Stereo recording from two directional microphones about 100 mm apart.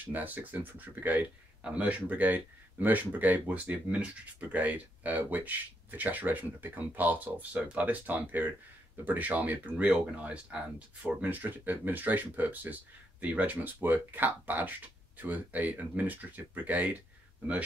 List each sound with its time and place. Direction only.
0.0 s speech: 15° right (ahead or behind)